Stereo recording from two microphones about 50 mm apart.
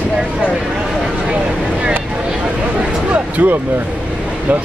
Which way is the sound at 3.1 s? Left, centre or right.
Right.